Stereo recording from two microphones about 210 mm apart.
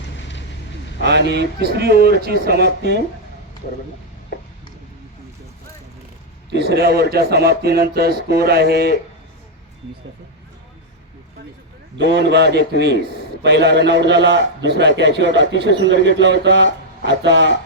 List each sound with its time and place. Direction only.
1.0 s a man's voice: 55° right (ahead or behind)
6.5 s a man's voice: 50° right (ahead or behind)
11.9 s a man's voice: 55° right (ahead or behind)